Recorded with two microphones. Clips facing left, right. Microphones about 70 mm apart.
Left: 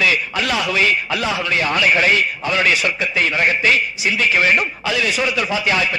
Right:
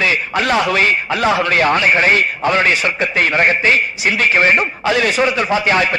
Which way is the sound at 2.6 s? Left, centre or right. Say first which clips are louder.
Right 2 dB; right.